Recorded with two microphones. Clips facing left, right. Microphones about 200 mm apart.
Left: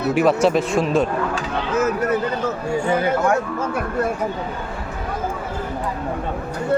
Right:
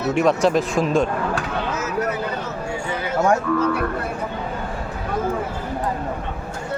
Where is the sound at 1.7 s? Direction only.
55° left (ahead or behind).